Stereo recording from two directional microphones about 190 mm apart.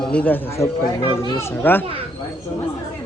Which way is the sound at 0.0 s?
5° left (ahead or behind).